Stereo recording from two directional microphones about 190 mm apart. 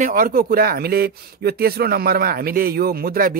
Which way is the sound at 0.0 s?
50° right (ahead or behind).